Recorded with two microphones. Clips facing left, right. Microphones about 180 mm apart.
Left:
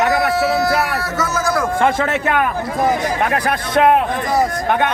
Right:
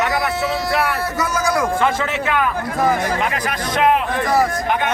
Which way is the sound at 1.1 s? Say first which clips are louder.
Left 2 dB; 10° right (ahead or behind).